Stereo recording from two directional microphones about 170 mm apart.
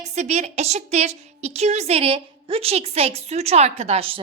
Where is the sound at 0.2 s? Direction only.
40° right (ahead or behind).